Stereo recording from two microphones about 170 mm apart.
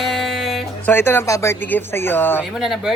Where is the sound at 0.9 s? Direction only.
10° left (ahead or behind).